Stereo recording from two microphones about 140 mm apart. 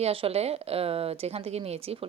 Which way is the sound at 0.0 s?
45° right (ahead or behind).